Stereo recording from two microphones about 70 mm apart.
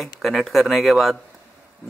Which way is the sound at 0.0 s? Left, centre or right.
Centre.